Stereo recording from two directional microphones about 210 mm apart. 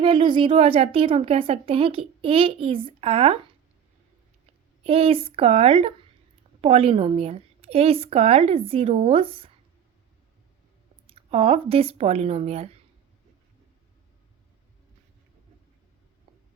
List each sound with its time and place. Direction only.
0.0 s a woman's voice: 25° right (ahead or behind)
4.8 s a woman's voice: 25° right (ahead or behind)
11.0 s speech: 25° right (ahead or behind)